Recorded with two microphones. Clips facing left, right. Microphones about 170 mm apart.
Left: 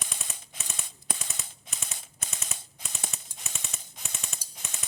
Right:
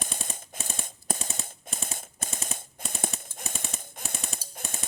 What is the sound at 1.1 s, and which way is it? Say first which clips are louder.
Machine gun: right 6 dB; 50° right (ahead or behind).